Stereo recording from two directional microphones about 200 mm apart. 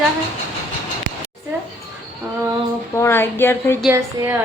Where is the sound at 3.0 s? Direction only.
10° left (ahead or behind).